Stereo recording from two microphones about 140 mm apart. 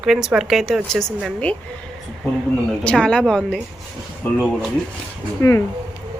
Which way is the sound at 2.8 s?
5° left (ahead or behind).